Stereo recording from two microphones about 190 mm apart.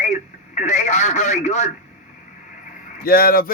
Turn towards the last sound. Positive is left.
turn(degrees=50)  # may be behind; listen again after turning